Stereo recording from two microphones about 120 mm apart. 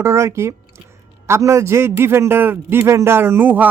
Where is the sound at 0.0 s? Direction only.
25° right (ahead or behind).